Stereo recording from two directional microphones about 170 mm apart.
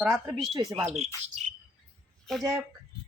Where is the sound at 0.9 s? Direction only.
40° right (ahead or behind).